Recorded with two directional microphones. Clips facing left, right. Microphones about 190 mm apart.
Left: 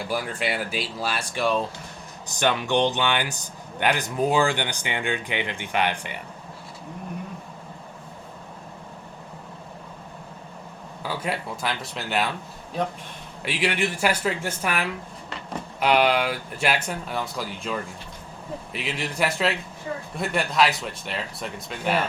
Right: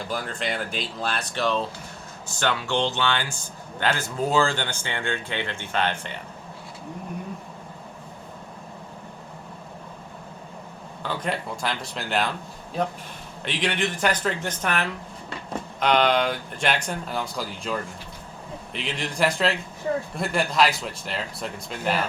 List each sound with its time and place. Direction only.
0.0 s speech: 10° left (ahead or behind)
11.0 s speech: 5° left (ahead or behind)
13.4 s speech: 5° left (ahead or behind)